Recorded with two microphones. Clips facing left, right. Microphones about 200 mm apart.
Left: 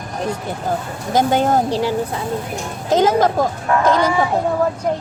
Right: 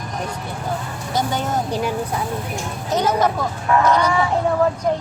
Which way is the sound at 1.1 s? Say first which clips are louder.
Left 7 dB; 90° left.